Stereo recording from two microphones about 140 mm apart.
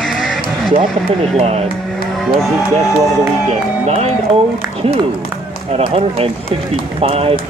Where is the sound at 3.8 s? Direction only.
50° right (ahead or behind).